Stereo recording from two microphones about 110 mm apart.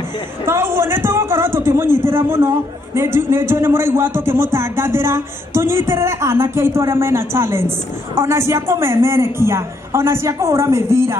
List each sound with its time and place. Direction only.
0.5 s speech: 20° right (ahead or behind)